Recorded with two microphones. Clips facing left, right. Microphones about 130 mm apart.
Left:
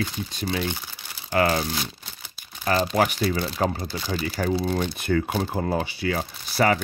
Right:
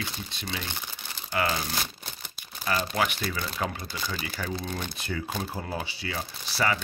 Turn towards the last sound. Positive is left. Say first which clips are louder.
# left 6 dB
turn(degrees=50)  # may be behind; listen again after turning